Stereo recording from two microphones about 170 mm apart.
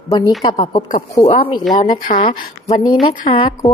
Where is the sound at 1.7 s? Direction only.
50° left (ahead or behind).